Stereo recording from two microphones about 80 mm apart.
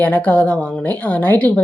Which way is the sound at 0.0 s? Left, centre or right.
Left.